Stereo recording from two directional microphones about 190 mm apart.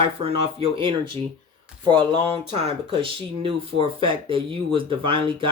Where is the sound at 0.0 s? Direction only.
30° right (ahead or behind).